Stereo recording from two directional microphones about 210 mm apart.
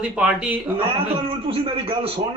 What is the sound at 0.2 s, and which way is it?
Speech, 5° right (ahead or behind).